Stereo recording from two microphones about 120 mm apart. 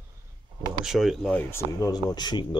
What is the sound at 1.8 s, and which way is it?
Speech, 35° left (ahead or behind).